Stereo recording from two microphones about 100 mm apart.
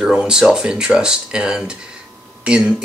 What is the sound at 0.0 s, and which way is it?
Speech, 10° right (ahead or behind).